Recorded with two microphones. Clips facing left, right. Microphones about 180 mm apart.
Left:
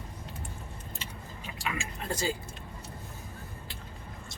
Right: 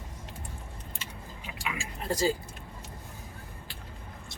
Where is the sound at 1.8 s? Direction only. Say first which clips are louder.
Right 7 dB; 35° right (ahead or behind).